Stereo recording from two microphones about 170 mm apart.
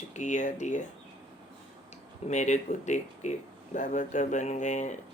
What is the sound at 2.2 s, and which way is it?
Speech, 45° left (ahead or behind).